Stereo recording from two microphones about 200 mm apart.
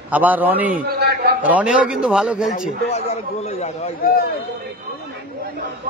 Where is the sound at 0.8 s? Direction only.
55° right (ahead or behind).